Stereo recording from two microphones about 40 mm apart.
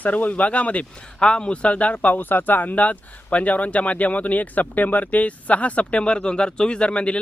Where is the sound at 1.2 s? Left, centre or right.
Left.